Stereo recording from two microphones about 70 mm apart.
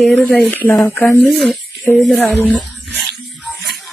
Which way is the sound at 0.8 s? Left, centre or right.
Left.